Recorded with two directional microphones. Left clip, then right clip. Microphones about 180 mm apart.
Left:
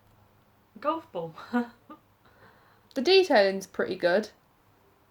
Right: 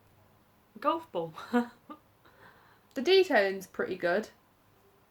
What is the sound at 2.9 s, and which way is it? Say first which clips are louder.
Speech: left 4 dB; 30° left (ahead or behind).